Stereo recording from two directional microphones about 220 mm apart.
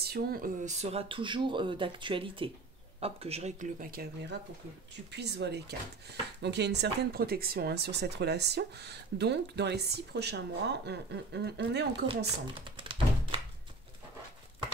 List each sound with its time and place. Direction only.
0.0 s speech: 45° right (ahead or behind)
12.6 s thunk: 20° right (ahead or behind)